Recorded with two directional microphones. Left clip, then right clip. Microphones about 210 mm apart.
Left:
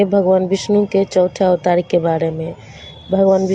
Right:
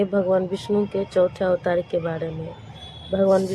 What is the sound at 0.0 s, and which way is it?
Speech, 20° left (ahead or behind).